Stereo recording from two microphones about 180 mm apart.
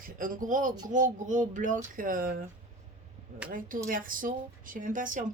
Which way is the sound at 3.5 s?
50° right (ahead or behind).